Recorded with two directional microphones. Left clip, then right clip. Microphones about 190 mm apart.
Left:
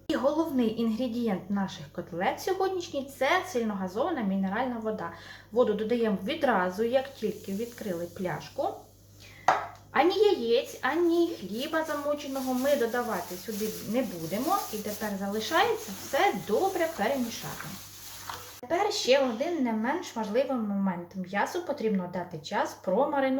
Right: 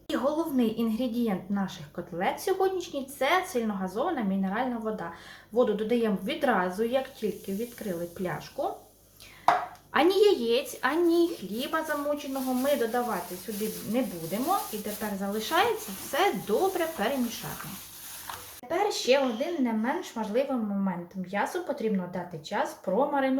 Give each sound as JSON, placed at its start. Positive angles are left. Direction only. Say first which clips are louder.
{"t": 0.1, "sound": "a woman's voice", "louder": "left 1 dB", "side_deg": -5}
{"t": 9.9, "sound": "speech", "louder": "right 1 dB", "side_deg": -20}
{"t": 11.6, "sound": "a woman's voice", "louder": "even", "side_deg": -5}
{"t": 18.7, "sound": "a woman's voice", "louder": "even", "side_deg": 0}